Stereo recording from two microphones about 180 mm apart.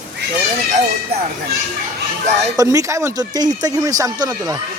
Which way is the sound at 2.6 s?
20° right (ahead or behind).